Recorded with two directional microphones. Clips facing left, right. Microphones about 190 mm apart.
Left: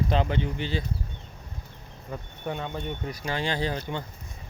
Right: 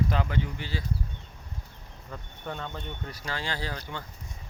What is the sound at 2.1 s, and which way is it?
Speech, 15° left (ahead or behind).